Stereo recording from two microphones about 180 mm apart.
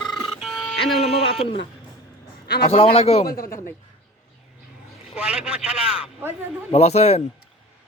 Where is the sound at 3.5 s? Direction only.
15° left (ahead or behind).